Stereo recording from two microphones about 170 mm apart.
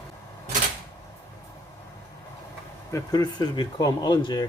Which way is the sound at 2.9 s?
20° left (ahead or behind).